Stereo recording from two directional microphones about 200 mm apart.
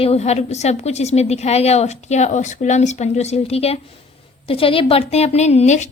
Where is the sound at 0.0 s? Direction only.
30° left (ahead or behind).